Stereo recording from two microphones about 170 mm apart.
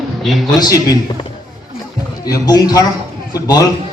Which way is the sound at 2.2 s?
20° left (ahead or behind).